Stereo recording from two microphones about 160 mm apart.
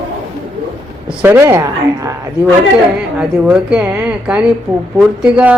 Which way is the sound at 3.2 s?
5° right (ahead or behind).